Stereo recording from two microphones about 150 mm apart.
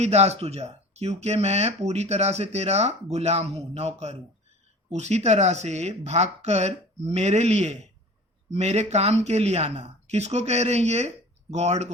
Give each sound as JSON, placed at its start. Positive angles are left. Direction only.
{"t": 0.0, "sound": "speech", "side_deg": -45}